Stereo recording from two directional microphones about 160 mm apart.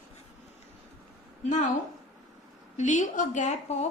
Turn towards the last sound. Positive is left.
turn(degrees=45)  # may be behind; listen again after turning